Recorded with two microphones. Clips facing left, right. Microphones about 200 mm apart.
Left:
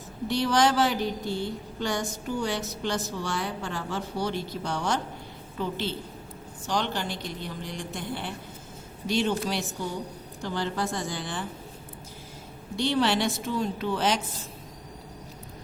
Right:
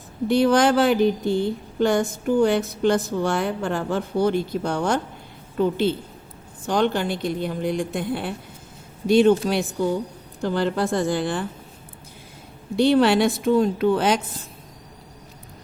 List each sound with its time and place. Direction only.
0.3 s a woman's voice: 55° right (ahead or behind)
13.0 s speech: 55° right (ahead or behind)